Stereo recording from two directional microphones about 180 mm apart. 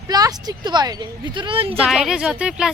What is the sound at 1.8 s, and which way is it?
Speech, centre (ahead or behind).